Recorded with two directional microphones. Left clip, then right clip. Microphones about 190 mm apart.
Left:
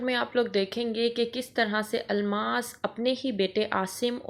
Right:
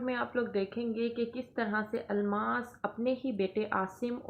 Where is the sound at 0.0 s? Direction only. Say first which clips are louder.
Left 6 dB; 25° left (ahead or behind).